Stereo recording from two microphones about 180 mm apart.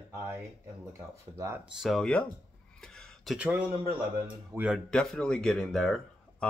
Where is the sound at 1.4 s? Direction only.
15° right (ahead or behind).